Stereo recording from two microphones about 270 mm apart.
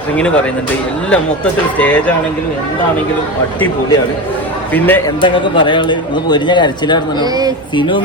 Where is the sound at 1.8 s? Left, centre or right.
Centre.